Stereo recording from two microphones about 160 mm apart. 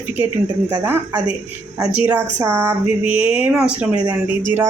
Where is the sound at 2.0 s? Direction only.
10° right (ahead or behind).